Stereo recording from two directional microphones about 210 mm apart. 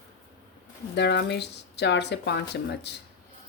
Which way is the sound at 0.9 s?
55° left (ahead or behind).